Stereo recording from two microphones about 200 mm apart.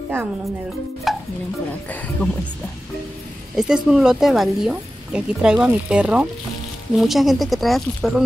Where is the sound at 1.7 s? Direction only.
10° left (ahead or behind).